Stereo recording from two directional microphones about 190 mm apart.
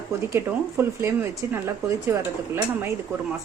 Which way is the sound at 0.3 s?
10° right (ahead or behind).